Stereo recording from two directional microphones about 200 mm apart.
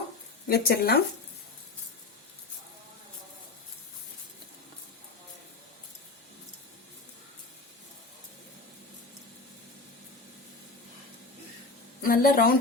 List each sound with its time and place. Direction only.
0.4 s speech: 50° left (ahead or behind)
12.0 s a woman's voice: 45° left (ahead or behind)